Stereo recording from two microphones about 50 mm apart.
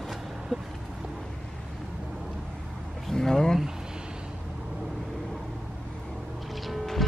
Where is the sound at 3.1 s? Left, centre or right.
Centre.